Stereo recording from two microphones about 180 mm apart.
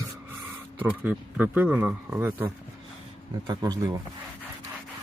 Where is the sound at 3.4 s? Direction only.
25° right (ahead or behind).